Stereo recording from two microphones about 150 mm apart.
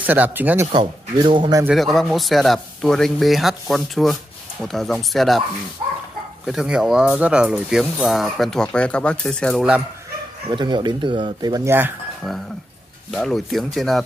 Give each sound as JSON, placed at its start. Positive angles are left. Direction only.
{"t": 0.0, "sound": "speech", "side_deg": -10}
{"t": 0.7, "sound": "speech", "side_deg": -35}
{"t": 1.7, "sound": "speech", "side_deg": 0}
{"t": 6.4, "sound": "speech", "side_deg": -5}
{"t": 10.5, "sound": "speech", "side_deg": -30}
{"t": 13.1, "sound": "speech", "side_deg": 0}